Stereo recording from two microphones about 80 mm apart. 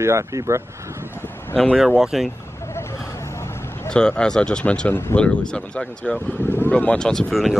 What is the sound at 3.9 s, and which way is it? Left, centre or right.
Speech, centre.